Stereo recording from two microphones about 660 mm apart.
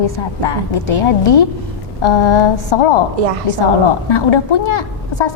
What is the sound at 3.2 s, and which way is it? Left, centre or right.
Speech, right.